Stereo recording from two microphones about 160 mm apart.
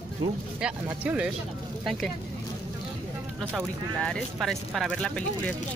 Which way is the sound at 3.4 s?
10° right (ahead or behind).